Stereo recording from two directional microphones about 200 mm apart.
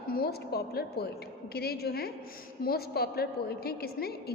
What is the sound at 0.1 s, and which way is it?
A woman's voice, 50° left (ahead or behind).